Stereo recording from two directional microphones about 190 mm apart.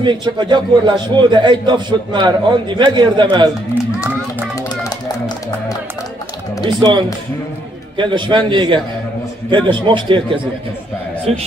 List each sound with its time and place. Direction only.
0.0 s a man's voice: 25° right (ahead or behind)
6.6 s a man's voice: 25° right (ahead or behind)
8.0 s a man's voice: 25° right (ahead or behind)